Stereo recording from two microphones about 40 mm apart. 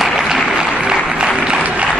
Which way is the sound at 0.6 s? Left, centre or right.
Centre.